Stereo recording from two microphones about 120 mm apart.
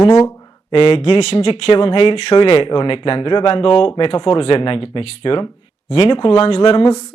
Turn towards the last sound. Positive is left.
turn(degrees=65)  # may be behind; listen again after turning